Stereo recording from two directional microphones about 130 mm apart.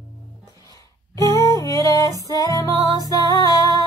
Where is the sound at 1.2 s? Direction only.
25° left (ahead or behind).